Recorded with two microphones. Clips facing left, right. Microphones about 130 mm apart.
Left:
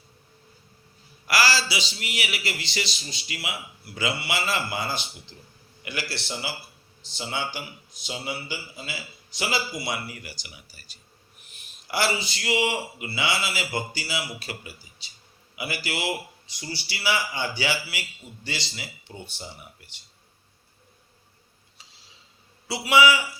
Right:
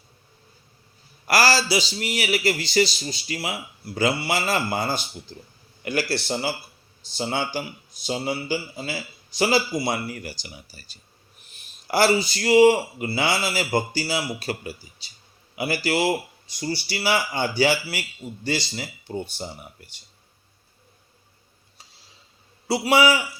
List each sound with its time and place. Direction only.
1.3 s a man's voice: 45° right (ahead or behind)
18.8 s speech: 45° right (ahead or behind)
22.6 s a man's voice: 40° right (ahead or behind)